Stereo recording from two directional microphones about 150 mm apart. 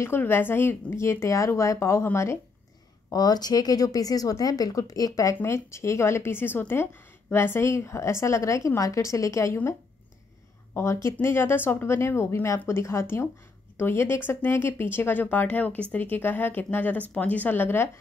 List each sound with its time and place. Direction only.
0.0 s a woman's voice: 15° left (ahead or behind)